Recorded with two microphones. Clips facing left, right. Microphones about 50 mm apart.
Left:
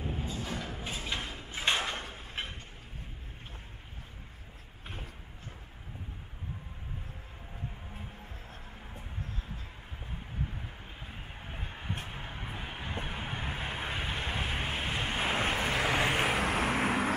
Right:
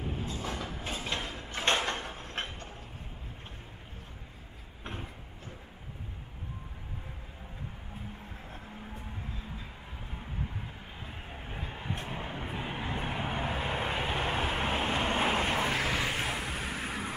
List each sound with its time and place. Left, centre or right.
0.0 s a sound: centre
12.1 s vehicle: centre
15.8 s vehicle: left
16.3 s vehicle: left